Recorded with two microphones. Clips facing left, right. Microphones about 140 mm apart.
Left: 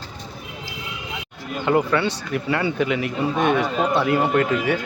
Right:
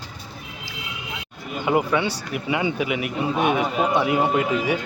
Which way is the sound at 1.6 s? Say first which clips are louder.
Left 1 dB; 10° right (ahead or behind).